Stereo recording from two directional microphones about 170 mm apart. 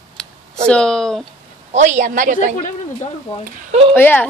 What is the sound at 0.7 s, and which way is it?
Speech, 5° left (ahead or behind).